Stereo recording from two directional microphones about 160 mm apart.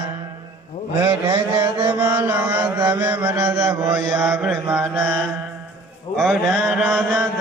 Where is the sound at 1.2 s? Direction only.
35° right (ahead or behind).